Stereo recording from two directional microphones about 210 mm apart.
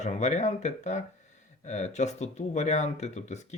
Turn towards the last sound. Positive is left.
turn(degrees=35)  # may be behind; listen again after turning